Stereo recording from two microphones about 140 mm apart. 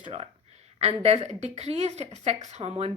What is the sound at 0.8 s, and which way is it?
A woman's voice, 50° right (ahead or behind).